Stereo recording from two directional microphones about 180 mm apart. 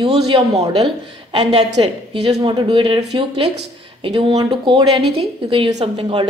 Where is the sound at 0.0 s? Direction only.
30° right (ahead or behind).